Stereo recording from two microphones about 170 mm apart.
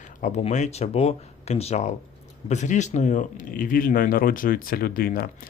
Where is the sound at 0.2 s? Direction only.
45° left (ahead or behind).